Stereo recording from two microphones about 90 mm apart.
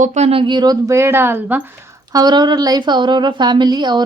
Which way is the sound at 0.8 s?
30° right (ahead or behind).